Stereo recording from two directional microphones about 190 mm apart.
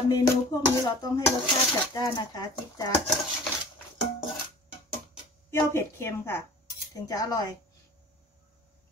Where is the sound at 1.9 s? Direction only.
20° left (ahead or behind).